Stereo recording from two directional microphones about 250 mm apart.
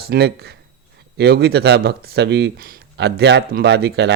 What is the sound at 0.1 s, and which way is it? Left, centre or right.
Speech, right.